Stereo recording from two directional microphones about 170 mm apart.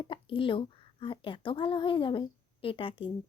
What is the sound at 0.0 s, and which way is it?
A woman's voice, 30° left (ahead or behind).